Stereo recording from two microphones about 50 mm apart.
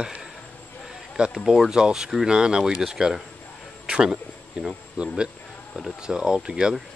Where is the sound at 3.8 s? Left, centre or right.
Centre.